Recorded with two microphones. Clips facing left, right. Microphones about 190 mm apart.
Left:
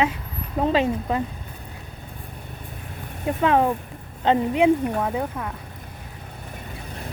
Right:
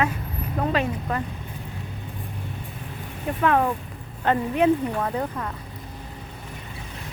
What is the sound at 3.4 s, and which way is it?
Speech, 25° left (ahead or behind).